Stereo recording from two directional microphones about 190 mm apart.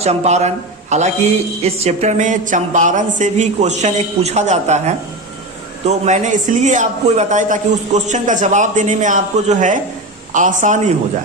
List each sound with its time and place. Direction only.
0.0 s a man's voice: 35° right (ahead or behind)